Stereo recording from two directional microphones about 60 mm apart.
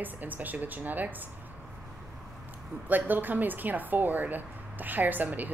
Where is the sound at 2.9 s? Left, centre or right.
Right.